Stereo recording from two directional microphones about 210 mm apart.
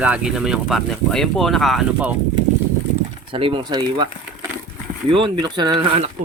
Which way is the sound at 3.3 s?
25° right (ahead or behind).